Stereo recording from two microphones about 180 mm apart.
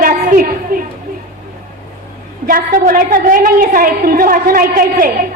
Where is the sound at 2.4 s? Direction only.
50° right (ahead or behind).